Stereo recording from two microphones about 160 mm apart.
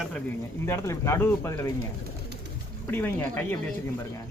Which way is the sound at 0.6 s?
20° left (ahead or behind).